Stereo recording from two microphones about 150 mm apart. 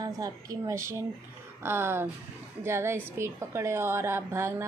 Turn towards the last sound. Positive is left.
turn(degrees=-15)  # may be behind; listen again after turning